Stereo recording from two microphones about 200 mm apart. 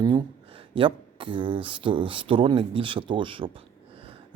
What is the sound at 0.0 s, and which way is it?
Speech, 25° right (ahead or behind).